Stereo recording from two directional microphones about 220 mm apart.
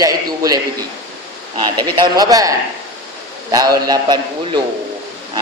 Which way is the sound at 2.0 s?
15° right (ahead or behind).